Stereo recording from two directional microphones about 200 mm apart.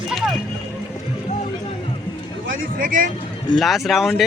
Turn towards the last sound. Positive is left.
turn(degrees=0)  # may be behind; listen again after turning